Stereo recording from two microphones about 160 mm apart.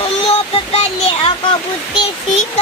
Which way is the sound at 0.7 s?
40° left (ahead or behind).